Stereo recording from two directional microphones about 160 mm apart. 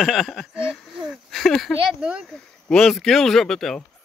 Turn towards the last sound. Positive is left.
turn(degrees=5)  # may be behind; listen again after turning